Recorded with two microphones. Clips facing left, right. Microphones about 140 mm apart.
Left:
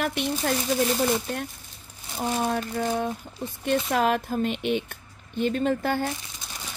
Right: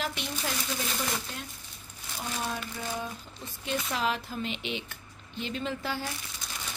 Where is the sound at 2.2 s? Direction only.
50° left (ahead or behind).